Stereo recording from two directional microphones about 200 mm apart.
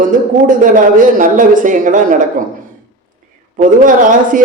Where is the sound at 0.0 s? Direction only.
40° right (ahead or behind).